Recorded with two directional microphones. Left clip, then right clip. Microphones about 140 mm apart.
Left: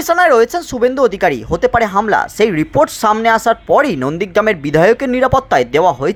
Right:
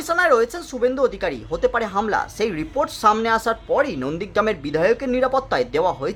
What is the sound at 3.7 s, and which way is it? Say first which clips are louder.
Speech: left 8 dB; 50° left (ahead or behind).